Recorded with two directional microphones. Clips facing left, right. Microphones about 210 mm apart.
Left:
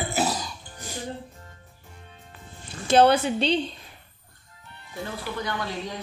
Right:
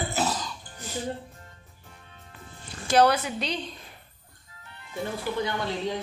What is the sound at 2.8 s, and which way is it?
Speech, 25° left (ahead or behind).